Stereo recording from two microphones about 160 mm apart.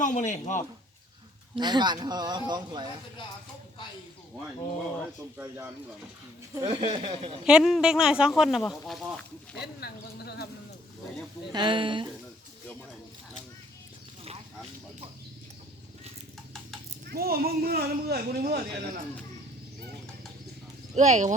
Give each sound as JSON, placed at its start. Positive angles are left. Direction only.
{"t": 0.0, "sound": "a man's voice", "side_deg": 50}
{"t": 1.5, "sound": "speech", "side_deg": -25}
{"t": 5.4, "sound": "speech", "side_deg": -10}
{"t": 6.7, "sound": "speech", "side_deg": -35}
{"t": 7.4, "sound": "speech", "side_deg": -5}
{"t": 9.8, "sound": "speech", "side_deg": 85}
{"t": 11.5, "sound": "speech", "side_deg": -30}
{"t": 17.1, "sound": "speech", "side_deg": -70}
{"t": 20.9, "sound": "speech", "side_deg": -45}